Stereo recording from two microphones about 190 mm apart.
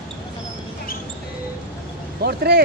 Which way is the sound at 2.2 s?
55° right (ahead or behind).